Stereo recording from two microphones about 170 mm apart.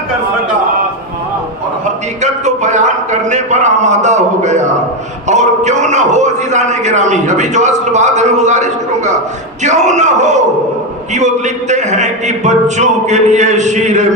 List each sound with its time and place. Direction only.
2.2 s a man's voice: 45° right (ahead or behind)